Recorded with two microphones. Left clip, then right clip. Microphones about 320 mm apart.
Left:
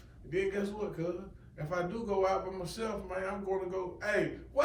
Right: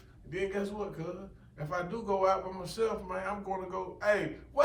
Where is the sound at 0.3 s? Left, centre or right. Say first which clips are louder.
Left 1 dB; centre.